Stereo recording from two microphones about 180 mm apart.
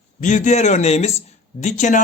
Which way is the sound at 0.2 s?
45° left (ahead or behind).